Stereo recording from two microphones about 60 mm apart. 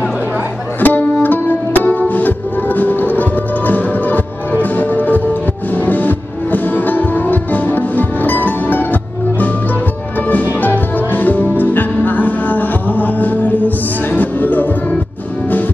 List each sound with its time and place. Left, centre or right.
0.7 s music: left
10.3 s music: left